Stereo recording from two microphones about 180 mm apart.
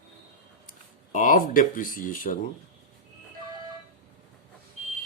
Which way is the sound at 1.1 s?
50° left (ahead or behind).